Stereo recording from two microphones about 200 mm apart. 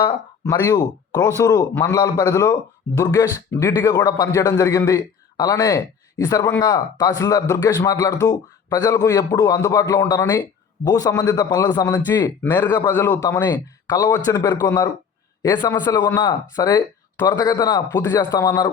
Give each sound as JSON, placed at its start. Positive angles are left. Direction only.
{"t": 0.7, "sound": "a man's voice", "side_deg": 15}